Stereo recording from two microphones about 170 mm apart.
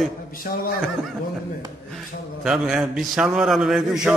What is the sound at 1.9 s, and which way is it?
Speech, centre (ahead or behind).